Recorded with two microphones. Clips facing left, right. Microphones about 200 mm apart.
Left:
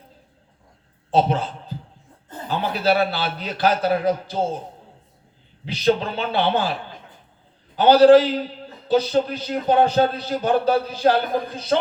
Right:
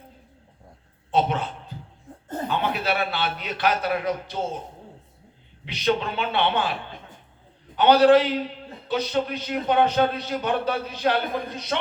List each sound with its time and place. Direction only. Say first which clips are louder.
1.1 s a man's voice: left 4 dB; 30° left (ahead or behind)
5.6 s a man's voice: left 4 dB; 35° left (ahead or behind)
7.8 s a man's voice: left 4 dB; 30° left (ahead or behind)